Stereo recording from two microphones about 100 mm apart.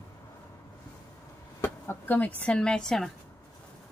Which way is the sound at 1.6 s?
20° left (ahead or behind).